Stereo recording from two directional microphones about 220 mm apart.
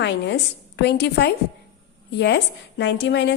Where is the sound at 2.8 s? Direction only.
50° left (ahead or behind).